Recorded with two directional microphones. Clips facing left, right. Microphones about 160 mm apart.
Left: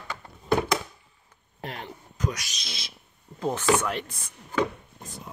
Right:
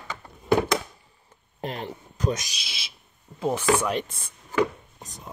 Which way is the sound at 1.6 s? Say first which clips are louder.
Right 5 dB; 25° right (ahead or behind).